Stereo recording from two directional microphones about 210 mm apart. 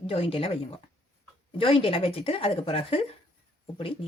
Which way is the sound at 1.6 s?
25° left (ahead or behind).